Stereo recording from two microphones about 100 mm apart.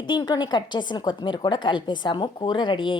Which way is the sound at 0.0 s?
45° left (ahead or behind).